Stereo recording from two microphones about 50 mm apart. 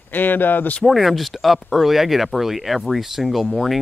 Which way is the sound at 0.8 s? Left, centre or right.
Centre.